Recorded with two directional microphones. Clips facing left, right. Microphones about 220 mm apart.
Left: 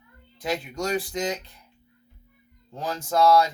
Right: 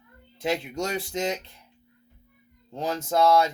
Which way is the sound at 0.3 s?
25° right (ahead or behind).